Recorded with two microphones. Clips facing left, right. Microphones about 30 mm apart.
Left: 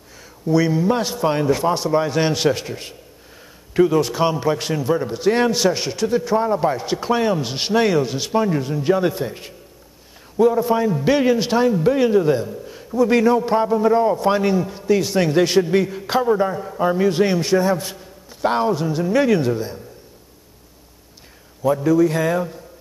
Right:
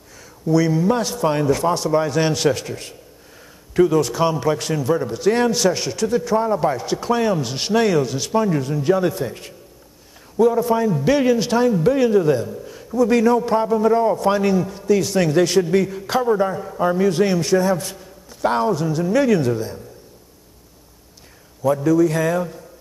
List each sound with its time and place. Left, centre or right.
0.2 s a man's voice: centre
10.6 s a man's voice: centre
21.6 s a man's voice: centre